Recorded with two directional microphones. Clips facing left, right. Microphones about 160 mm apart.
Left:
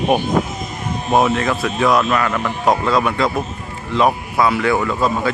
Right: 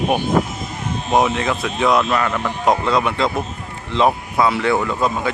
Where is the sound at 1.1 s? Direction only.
20° right (ahead or behind).